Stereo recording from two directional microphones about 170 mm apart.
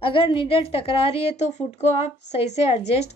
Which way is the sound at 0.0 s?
30° left (ahead or behind).